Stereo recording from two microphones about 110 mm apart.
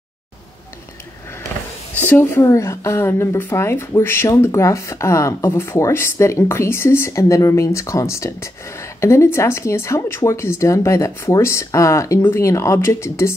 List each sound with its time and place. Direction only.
2.0 s a woman's voice: 20° left (ahead or behind)